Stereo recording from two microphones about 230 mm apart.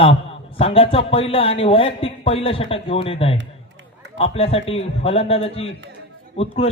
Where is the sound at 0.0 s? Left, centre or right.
Left.